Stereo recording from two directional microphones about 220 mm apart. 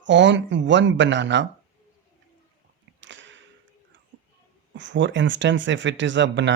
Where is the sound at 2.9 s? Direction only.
55° right (ahead or behind).